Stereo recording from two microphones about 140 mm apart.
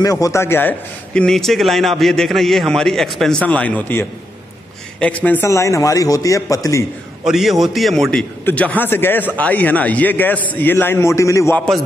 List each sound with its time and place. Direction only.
0.0 s a man's voice: 25° left (ahead or behind)
7.2 s a man's voice: centre (ahead or behind); by 11.5 s 20° left (ahead or behind)
11.5 s a man's voice: 5° left (ahead or behind)